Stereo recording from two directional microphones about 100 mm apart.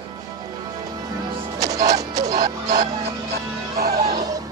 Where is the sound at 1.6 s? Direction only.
35° right (ahead or behind).